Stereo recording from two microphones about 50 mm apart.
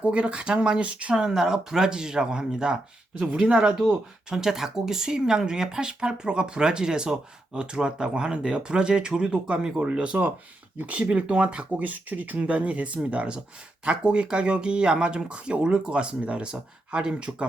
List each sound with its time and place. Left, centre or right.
0.0 s speech: right
1.1 s speech: centre